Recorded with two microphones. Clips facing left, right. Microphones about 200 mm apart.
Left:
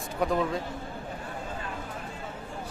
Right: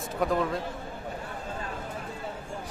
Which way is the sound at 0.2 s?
Centre (ahead or behind).